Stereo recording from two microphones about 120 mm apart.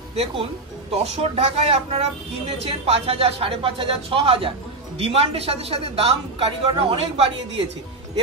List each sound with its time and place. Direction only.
0.1 s speech: 60° right (ahead or behind)